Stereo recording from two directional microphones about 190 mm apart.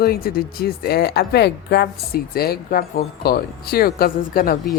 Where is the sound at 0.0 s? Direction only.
55° left (ahead or behind).